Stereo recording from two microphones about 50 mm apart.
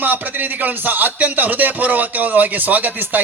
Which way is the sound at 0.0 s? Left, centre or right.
Right.